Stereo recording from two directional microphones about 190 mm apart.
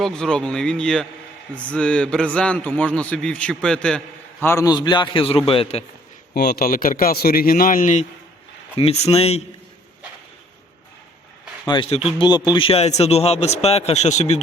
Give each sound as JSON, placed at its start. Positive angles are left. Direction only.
{"t": 0.0, "sound": "a man's voice", "side_deg": 5}
{"t": 4.4, "sound": "a man's voice", "side_deg": 15}
{"t": 6.3, "sound": "speech", "side_deg": 55}
{"t": 8.7, "sound": "speech", "side_deg": 30}
{"t": 11.7, "sound": "a man's voice", "side_deg": 30}